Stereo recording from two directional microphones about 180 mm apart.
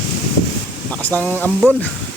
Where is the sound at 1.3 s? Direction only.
10° right (ahead or behind).